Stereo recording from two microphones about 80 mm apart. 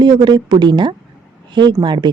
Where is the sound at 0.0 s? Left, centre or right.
Right.